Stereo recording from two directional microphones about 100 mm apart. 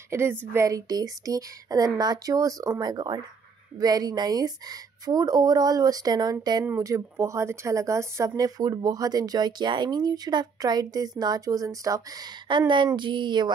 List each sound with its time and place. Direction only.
0.1 s a woman's voice: 25° right (ahead or behind)
0.7 s a woman's voice: 35° right (ahead or behind)
12.4 s a woman's voice: 50° right (ahead or behind)